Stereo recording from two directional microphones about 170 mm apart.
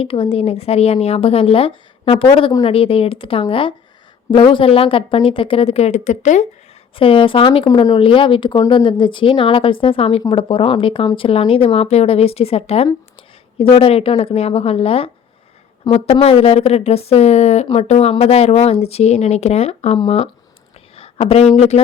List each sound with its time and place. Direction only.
0.0 s speech: 30° left (ahead or behind)
6.9 s speech: 30° left (ahead or behind)
20.9 s a sound: 35° left (ahead or behind)